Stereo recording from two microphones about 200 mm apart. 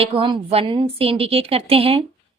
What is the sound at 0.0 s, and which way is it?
Speech, 25° right (ahead or behind).